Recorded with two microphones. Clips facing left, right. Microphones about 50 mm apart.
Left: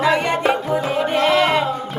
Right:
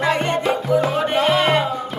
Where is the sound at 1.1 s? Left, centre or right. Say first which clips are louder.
Left 1 dB; centre.